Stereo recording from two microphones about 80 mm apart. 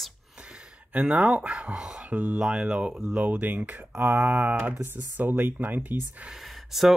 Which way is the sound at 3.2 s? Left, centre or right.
Right.